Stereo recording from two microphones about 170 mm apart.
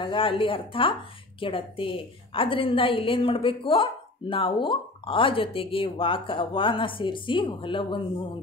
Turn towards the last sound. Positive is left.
turn(degrees=30)  # may be behind; listen again after turning